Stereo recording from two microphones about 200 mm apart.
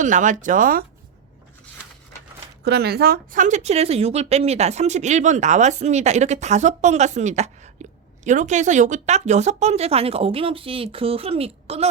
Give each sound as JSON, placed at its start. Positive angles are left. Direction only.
{"t": 0.0, "sound": "speech", "side_deg": -40}
{"t": 2.6, "sound": "speech", "side_deg": -55}